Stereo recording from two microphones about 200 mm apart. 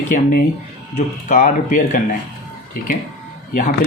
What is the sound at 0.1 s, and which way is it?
Speech, 40° left (ahead or behind).